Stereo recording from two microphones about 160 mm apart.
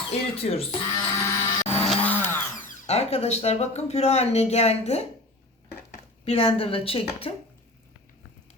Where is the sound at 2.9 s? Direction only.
40° left (ahead or behind).